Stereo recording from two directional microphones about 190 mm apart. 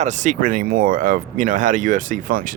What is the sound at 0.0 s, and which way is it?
Speech, 40° right (ahead or behind).